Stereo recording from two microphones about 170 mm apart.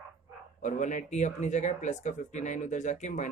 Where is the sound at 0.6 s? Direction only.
45° left (ahead or behind).